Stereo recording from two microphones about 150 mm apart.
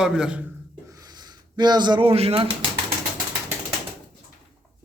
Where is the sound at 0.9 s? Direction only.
25° right (ahead or behind).